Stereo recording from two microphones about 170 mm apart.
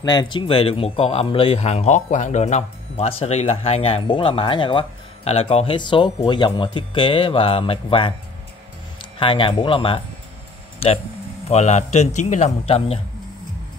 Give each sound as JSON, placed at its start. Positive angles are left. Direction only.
{"t": 0.0, "sound": "speech", "side_deg": 25}
{"t": 9.2, "sound": "speech", "side_deg": 30}
{"t": 11.4, "sound": "speech", "side_deg": 40}